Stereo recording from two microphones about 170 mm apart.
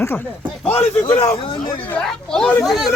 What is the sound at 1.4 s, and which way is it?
Speech, 30° left (ahead or behind).